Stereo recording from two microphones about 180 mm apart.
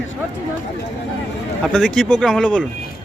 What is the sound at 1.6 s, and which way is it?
Speech, 5° left (ahead or behind).